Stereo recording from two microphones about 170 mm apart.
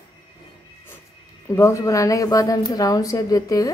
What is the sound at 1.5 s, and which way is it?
A woman's voice, 20° left (ahead or behind).